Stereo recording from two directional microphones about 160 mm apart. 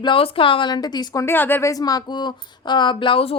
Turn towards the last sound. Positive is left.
turn(degrees=35)  # may be behind; listen again after turning